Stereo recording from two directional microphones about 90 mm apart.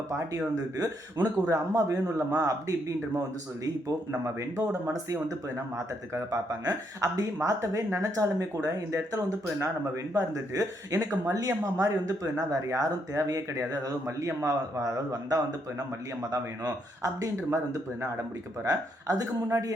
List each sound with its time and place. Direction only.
0.8 s speech: 40° right (ahead or behind)